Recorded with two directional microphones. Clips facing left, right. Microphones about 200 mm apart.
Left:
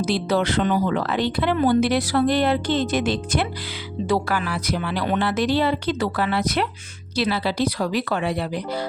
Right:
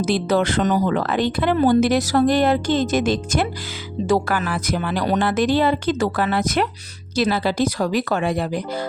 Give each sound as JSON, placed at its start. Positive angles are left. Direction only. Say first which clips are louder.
{"t": 0.0, "sound": "speech", "louder": "right 2 dB", "side_deg": -50}